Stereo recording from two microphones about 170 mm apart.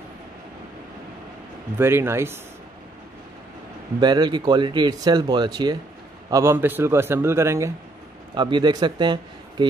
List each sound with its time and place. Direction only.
1.8 s a man's voice: 15° right (ahead or behind)
4.0 s speech: 25° right (ahead or behind)
6.3 s a man's voice: 15° right (ahead or behind)
8.4 s speech: 25° right (ahead or behind)